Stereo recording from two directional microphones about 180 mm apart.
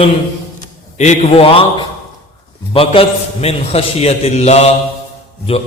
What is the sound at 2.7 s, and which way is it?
A man's voice, 30° left (ahead or behind).